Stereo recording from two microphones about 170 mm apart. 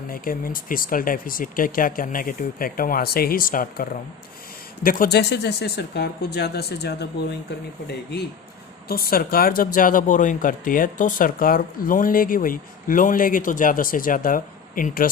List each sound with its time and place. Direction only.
0.1 s speech: 55° left (ahead or behind); by 7.1 s 70° left (ahead or behind)
8.9 s speech: 60° left (ahead or behind)